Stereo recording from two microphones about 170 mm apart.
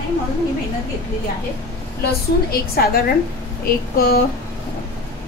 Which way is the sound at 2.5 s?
65° left (ahead or behind).